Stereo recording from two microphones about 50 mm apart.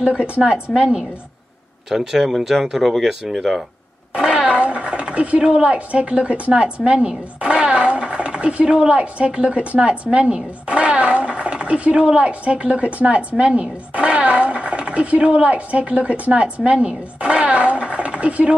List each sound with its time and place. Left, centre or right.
0.0 s a woman's voice: centre
4.2 s speech: centre